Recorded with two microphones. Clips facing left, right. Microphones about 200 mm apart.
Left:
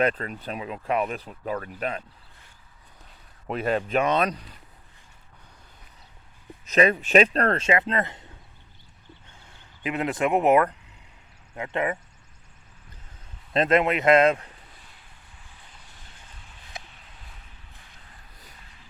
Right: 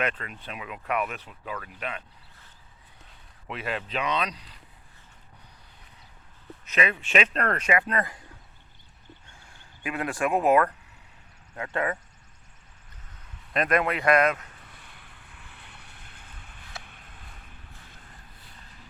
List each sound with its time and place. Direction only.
0.0 s speech: 40° left (ahead or behind)
3.4 s speech: 40° left (ahead or behind)
6.7 s speech: 40° left (ahead or behind); by 8.2 s 25° left (ahead or behind)
9.4 s speech: 20° left (ahead or behind)
13.5 s speech: 25° left (ahead or behind)
14.9 s vehicle: 65° right (ahead or behind)
16.8 s a sound: 55° right (ahead or behind)